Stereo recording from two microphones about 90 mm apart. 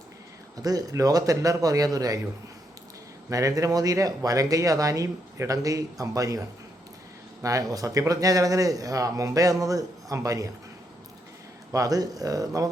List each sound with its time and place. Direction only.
0.5 s speech: 45° right (ahead or behind)
3.2 s speech: 40° right (ahead or behind)
11.7 s speech: 40° right (ahead or behind)